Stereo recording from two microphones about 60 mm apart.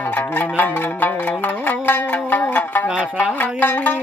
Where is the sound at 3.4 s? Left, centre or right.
Left.